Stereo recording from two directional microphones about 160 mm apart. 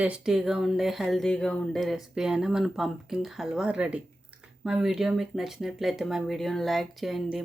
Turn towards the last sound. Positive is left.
turn(degrees=0)  # may be behind; listen again after turning